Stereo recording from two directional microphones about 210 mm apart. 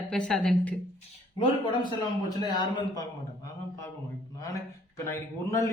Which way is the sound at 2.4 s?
20° left (ahead or behind).